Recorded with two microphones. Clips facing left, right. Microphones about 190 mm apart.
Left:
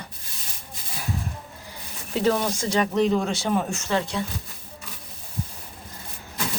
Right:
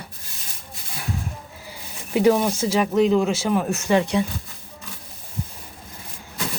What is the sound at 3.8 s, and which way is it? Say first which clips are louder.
Speech: right 6 dB; 15° right (ahead or behind).